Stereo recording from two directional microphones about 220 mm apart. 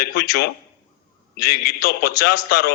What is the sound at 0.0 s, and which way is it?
A man's voice, 45° left (ahead or behind).